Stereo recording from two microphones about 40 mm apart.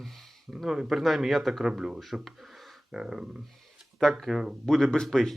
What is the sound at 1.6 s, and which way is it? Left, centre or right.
Speech, centre.